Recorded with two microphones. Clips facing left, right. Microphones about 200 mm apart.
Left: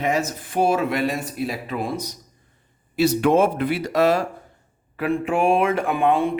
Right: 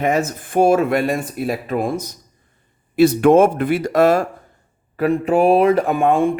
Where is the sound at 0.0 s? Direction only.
50° right (ahead or behind).